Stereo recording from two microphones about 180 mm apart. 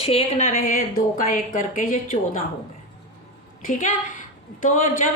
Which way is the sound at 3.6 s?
45° left (ahead or behind).